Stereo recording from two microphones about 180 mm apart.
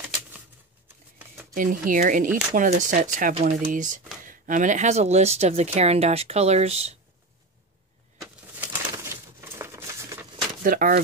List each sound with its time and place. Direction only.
1.5 s speech: 50° right (ahead or behind)
8.2 s crumpling: 10° right (ahead or behind)
10.6 s speech: 50° right (ahead or behind)